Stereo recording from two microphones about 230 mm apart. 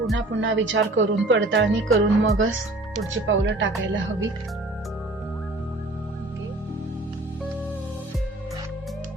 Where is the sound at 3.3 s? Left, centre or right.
Right.